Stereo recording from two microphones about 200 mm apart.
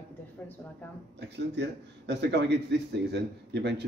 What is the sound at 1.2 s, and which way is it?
A man's voice, 60° right (ahead or behind).